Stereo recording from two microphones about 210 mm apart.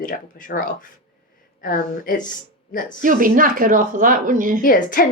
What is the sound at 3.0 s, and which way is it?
Speech, 40° right (ahead or behind).